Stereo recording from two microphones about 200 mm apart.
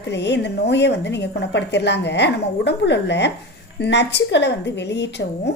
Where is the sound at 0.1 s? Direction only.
60° left (ahead or behind).